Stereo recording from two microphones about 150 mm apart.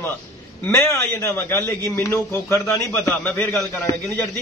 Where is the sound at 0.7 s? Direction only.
20° left (ahead or behind).